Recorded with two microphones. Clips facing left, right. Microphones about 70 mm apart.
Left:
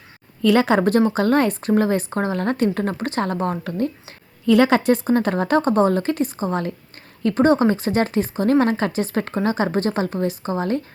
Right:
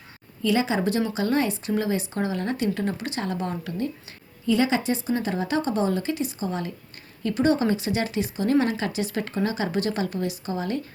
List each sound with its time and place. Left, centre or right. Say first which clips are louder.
0.4 s speech: left 7 dB; left
4.4 s speech: left 7 dB; left